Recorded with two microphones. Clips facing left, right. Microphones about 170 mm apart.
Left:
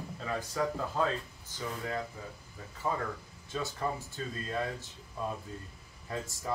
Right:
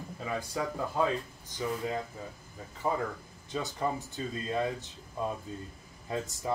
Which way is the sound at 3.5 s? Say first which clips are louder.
Right 2 dB; 20° right (ahead or behind).